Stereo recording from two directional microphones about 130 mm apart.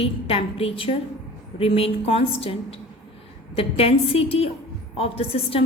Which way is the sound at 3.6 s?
50° left (ahead or behind).